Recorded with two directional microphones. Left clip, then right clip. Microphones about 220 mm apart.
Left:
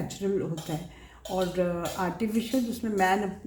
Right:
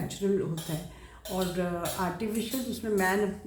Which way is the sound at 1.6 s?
40° left (ahead or behind).